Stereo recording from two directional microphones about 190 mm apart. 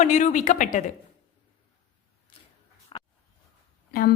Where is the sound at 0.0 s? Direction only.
40° left (ahead or behind).